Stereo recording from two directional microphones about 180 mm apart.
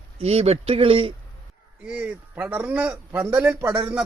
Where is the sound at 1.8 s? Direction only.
5° right (ahead or behind).